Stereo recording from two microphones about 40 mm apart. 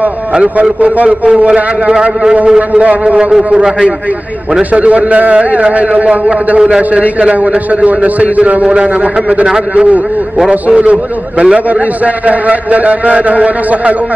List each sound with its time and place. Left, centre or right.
0.4 s a man's voice: right
2.7 s a man's voice: right
3.5 s a man's voice: right
4.6 s a man's voice: right
10.8 s a man's voice: right